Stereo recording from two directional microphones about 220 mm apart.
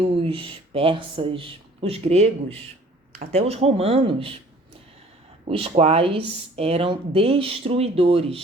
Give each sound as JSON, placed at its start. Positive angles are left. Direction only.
{"t": 0.0, "sound": "speech", "side_deg": -25}
{"t": 5.5, "sound": "speech", "side_deg": -25}